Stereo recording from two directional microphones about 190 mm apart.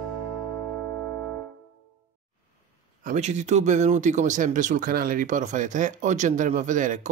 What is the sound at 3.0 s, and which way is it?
Speech, 40° right (ahead or behind).